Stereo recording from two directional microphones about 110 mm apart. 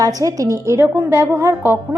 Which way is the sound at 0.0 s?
35° right (ahead or behind).